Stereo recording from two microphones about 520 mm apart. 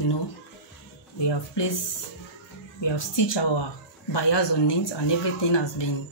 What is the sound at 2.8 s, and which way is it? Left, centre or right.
Speech, left.